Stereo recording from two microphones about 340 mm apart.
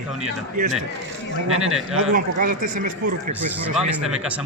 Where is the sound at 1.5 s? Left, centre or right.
Right.